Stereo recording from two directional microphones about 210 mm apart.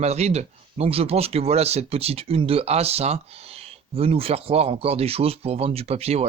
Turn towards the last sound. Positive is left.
turn(degrees=-30)  # may be behind; listen again after turning